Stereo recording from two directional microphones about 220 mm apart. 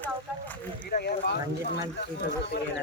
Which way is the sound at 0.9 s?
45° left (ahead or behind).